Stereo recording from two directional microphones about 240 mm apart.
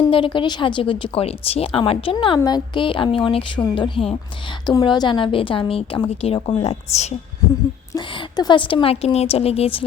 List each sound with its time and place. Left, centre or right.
0.1 s a woman's voice: left